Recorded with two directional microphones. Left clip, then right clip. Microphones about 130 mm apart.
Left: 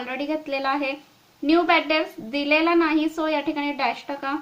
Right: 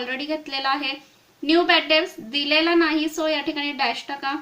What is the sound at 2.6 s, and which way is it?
A woman's voice, 40° left (ahead or behind).